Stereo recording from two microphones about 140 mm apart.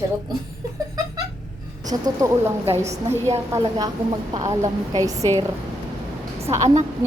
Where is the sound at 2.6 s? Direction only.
50° right (ahead or behind).